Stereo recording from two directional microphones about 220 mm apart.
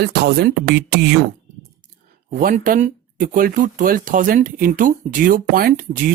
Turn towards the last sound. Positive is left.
turn(degrees=-40)  # may be behind; listen again after turning